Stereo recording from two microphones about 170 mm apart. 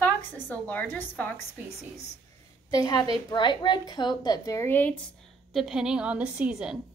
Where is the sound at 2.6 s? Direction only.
20° left (ahead or behind).